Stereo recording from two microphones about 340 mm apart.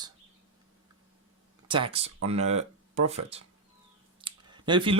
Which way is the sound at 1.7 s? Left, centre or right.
Centre.